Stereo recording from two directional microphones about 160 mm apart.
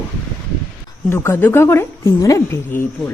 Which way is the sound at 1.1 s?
15° left (ahead or behind).